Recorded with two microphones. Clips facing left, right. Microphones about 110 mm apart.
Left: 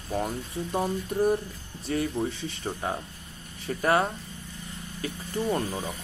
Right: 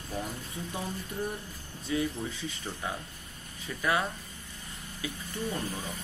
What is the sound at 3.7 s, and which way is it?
Speech, 45° left (ahead or behind).